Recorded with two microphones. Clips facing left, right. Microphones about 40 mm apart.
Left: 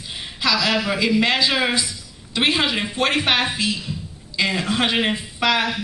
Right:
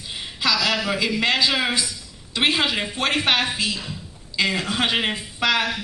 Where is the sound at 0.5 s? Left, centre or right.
Left.